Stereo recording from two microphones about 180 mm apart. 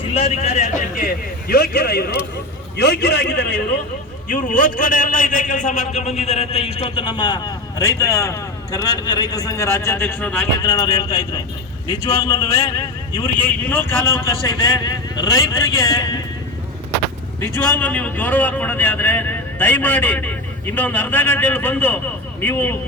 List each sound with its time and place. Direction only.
0.0 s a man's voice: 35° left (ahead or behind)
1.5 s a man's voice: 55° left (ahead or behind)
4.3 s a man's voice: 50° left (ahead or behind); by 16.0 s 20° left (ahead or behind)
17.4 s speech: 10° left (ahead or behind)